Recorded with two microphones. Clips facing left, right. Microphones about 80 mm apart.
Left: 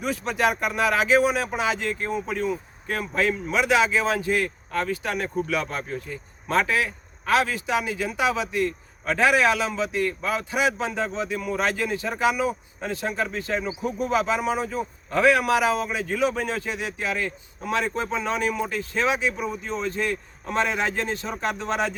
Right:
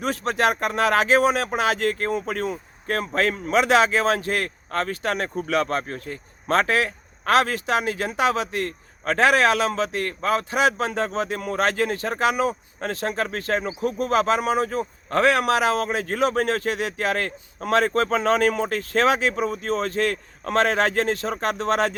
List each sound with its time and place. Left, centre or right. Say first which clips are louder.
0.0 s a man's voice: right 2 dB; right